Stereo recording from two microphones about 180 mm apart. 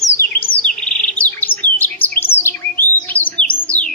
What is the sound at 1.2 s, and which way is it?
Chirp, 10° left (ahead or behind).